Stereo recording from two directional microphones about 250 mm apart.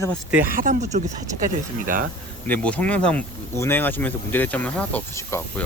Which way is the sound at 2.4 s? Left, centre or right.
Centre.